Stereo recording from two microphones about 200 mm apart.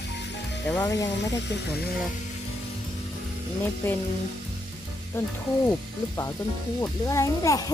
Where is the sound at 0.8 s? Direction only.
15° left (ahead or behind).